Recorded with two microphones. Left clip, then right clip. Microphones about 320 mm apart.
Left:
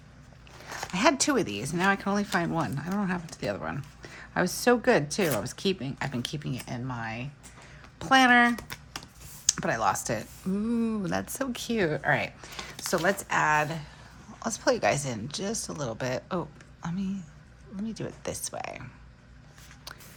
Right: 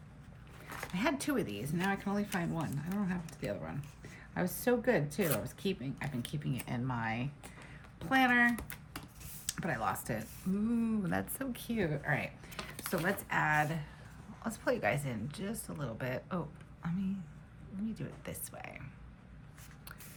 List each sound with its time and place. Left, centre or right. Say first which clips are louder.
0.8 s speech: left 11 dB; centre
7.9 s speech: left 9 dB; centre
17.9 s speech: left 10 dB; centre